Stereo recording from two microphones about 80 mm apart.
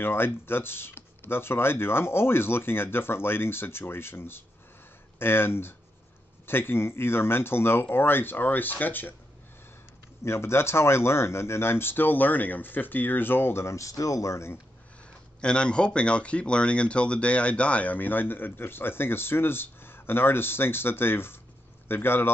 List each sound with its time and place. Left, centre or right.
0.0 s speech: left
10.2 s speech: left
15.4 s speech: centre; by 22.3 s left